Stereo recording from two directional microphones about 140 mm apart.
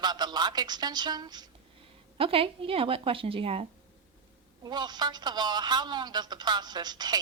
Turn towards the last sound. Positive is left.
turn(degrees=-30)  # may be behind; listen again after turning